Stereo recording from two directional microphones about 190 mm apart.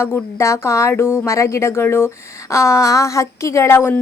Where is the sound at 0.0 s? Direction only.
15° left (ahead or behind).